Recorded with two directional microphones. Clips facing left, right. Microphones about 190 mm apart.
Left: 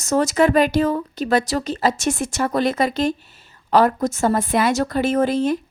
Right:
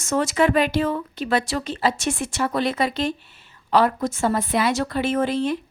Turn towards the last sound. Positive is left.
turn(degrees=45)  # may be behind; listen again after turning